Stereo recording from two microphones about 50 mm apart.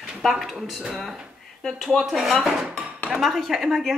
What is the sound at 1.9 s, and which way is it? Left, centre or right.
Speech, centre.